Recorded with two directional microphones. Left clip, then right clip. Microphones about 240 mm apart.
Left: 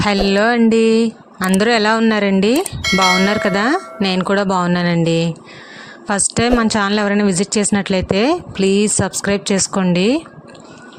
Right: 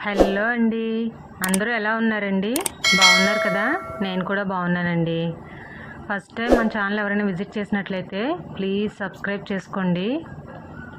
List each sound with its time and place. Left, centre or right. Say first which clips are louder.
0.0 s speech: left 5 dB; left
2.6 s speech: left 1 dB; centre
3.4 s bell: left 5 dB; left
4.0 s speech: left 11 dB; left